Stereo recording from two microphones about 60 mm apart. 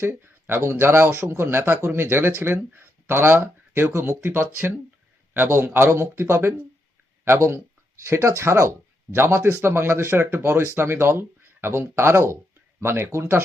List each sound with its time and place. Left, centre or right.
0.2 s a man's voice: right
4.2 s a man's voice: right
11.1 s speech: right